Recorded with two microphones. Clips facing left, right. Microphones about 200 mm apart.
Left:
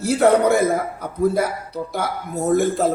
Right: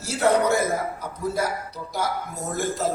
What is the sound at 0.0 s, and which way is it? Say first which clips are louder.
A man's voice: left 6 dB; 55° left (ahead or behind).